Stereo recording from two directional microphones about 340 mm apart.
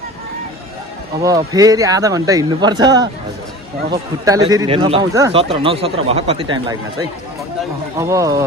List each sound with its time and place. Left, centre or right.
1.2 s speech: centre
4.3 s speech: centre
7.9 s speech: centre